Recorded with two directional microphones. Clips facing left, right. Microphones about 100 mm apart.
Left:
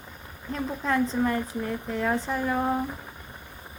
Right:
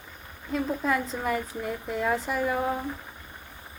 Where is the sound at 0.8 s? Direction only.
5° right (ahead or behind).